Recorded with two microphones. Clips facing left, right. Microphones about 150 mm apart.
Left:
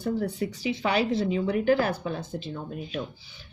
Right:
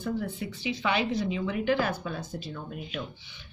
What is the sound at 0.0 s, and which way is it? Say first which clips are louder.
Speech: left 4 dB; 40° left (ahead or behind).